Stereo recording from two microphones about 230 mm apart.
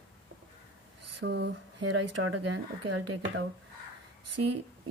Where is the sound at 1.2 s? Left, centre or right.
Right.